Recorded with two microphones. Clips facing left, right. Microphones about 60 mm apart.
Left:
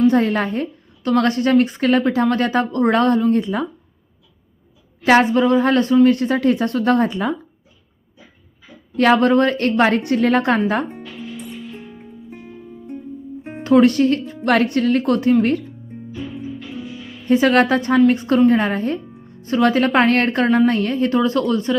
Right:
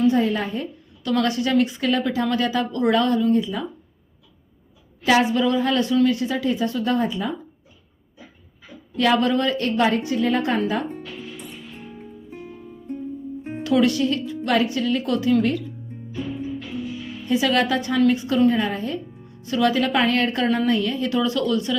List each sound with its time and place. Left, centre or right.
0.1 s a woman's voice: left
1.0 s a woman's voice: left
5.0 s a woman's voice: left
9.0 s a woman's voice: left
13.5 s speech: left
14.5 s a woman's voice: left
17.2 s a woman's voice: left